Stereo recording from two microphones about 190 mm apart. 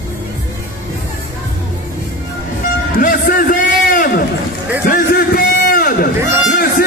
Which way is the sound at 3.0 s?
50° left (ahead or behind).